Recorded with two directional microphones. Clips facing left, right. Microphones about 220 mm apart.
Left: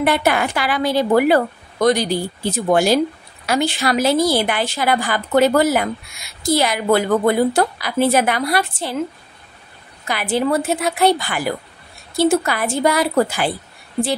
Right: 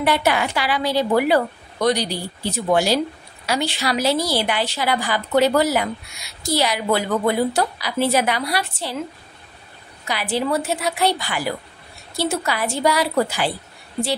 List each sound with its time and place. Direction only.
0.0 s a woman's voice: 50° left (ahead or behind)
10.0 s a woman's voice: 50° left (ahead or behind)